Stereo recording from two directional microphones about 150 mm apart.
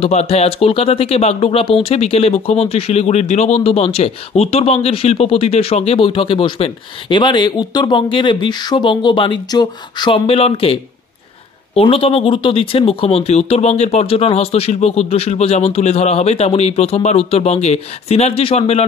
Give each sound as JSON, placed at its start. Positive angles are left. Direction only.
{"t": 0.0, "sound": "speech", "side_deg": 45}